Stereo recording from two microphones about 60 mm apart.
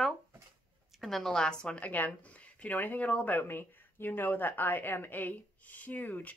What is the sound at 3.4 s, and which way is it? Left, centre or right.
A woman's voice, left.